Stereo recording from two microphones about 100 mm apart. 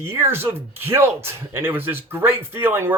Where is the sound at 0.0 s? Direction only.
25° right (ahead or behind).